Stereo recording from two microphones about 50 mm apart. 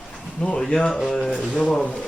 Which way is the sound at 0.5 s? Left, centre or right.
Centre.